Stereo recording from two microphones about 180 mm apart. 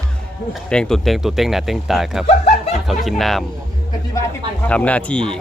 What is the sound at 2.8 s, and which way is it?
Speech, centre (ahead or behind).